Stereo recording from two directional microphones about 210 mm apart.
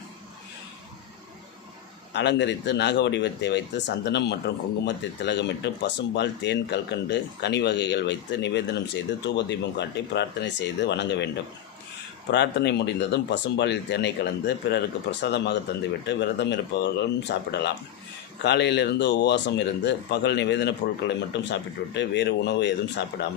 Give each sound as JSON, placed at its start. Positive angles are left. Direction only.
{"t": 2.1, "sound": "speech", "side_deg": 55}
{"t": 12.3, "sound": "speech", "side_deg": 55}